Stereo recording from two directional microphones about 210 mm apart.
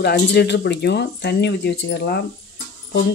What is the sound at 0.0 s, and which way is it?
Speech, 55° left (ahead or behind).